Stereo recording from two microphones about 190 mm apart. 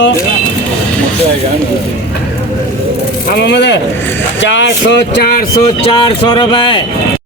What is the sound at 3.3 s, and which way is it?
Speech, 65° left (ahead or behind).